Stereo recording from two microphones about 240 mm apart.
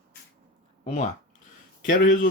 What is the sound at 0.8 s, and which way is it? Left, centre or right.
Speech, left.